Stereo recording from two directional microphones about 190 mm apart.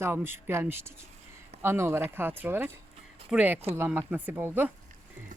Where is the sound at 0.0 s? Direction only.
10° right (ahead or behind).